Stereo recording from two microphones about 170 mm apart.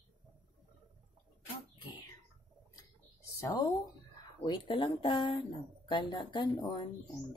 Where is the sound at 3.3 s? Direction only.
20° left (ahead or behind).